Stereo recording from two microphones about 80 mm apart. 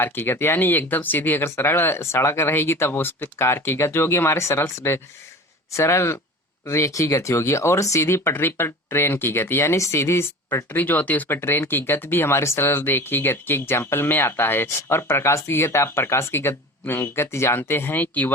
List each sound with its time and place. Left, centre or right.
0.0 s speech: left